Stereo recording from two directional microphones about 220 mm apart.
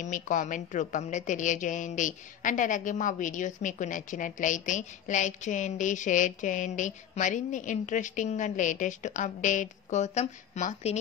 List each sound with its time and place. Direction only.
0.0 s a woman's voice: 35° left (ahead or behind)